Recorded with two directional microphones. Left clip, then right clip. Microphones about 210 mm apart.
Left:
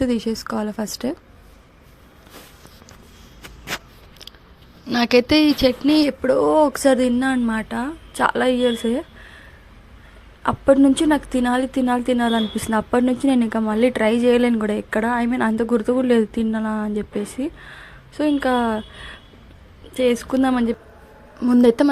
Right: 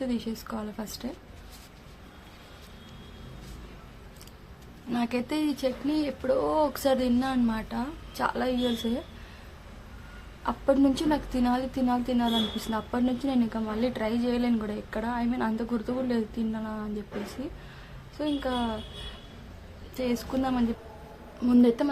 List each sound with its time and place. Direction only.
0.0 s speech: 30° left (ahead or behind)
4.9 s a woman's voice: 30° left (ahead or behind)
10.4 s a woman's voice: 25° left (ahead or behind)
19.9 s a woman's voice: 30° left (ahead or behind)